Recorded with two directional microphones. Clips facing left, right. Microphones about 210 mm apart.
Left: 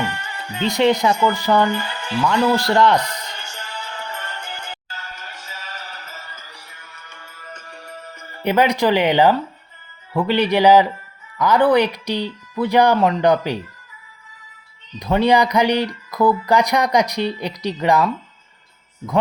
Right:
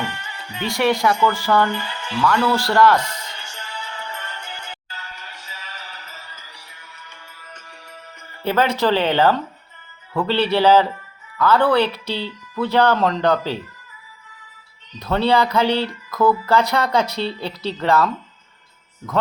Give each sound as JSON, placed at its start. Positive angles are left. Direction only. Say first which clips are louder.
{"t": 0.0, "sound": "music", "louder": "left 3 dB", "side_deg": 45}
{"t": 0.7, "sound": "speech", "louder": "left 2 dB", "side_deg": 20}
{"t": 1.7, "sound": "speech", "louder": "left 3 dB", "side_deg": 45}
{"t": 2.2, "sound": "speech", "louder": "left 1 dB", "side_deg": 15}
{"t": 3.0, "sound": "music", "louder": "left 2 dB", "side_deg": 40}
{"t": 8.4, "sound": "speech", "louder": "left 2 dB", "side_deg": 15}
{"t": 14.9, "sound": "speech", "louder": "left 2 dB", "side_deg": 15}